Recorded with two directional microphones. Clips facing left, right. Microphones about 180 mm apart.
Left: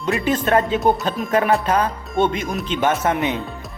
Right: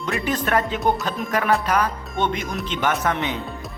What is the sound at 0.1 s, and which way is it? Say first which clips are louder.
Music: left 4 dB; 25° left (ahead or behind).